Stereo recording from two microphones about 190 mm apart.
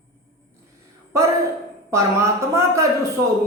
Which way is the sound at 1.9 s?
15° right (ahead or behind).